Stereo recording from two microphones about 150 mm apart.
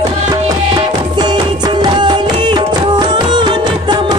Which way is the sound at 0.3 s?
30° right (ahead or behind).